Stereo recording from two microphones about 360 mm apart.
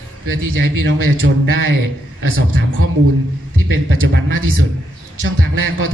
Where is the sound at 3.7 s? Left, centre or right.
Right.